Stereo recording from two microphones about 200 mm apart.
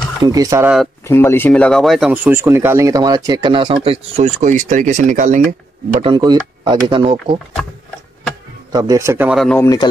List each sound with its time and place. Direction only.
0.2 s a man's voice: 20° right (ahead or behind)
1.0 s speech: 10° left (ahead or behind); by 5.4 s 35° right (ahead or behind)
6.0 s speech: 25° right (ahead or behind)
8.7 s a man's voice: 15° right (ahead or behind)
9.3 s speech: centre (ahead or behind)
9.6 s speech: 15° left (ahead or behind)